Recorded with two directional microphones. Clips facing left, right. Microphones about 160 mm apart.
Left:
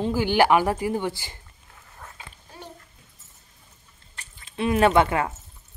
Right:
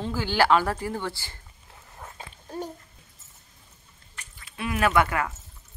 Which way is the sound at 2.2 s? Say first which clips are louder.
Right 9 dB; 45° right (ahead or behind).